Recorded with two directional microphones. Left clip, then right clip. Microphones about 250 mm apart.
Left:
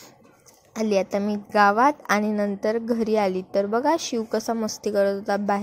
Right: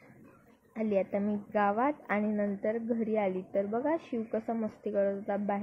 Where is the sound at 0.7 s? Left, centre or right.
Left.